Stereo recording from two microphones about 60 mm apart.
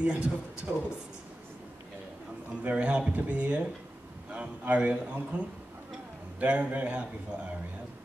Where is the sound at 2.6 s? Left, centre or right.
Right.